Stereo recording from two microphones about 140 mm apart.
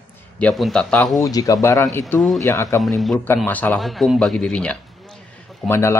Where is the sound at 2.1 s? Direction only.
Centre (ahead or behind).